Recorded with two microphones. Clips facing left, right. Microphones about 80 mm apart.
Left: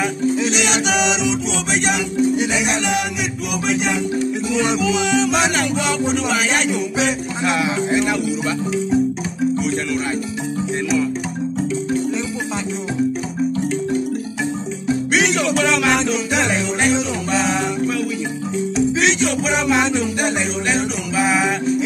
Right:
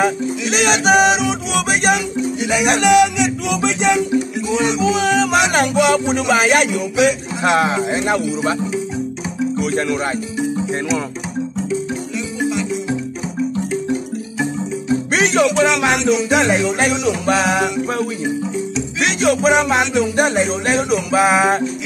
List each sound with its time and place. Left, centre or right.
0.5 s music: right
2.3 s speech: left
2.6 s music: right
4.5 s music: right
15.1 s music: right
15.6 s music: right
17.3 s music: right
19.1 s music: right